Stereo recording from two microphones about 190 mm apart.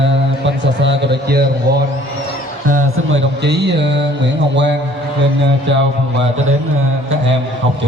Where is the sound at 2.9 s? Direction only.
85° right; by 3.9 s 65° right (ahead or behind).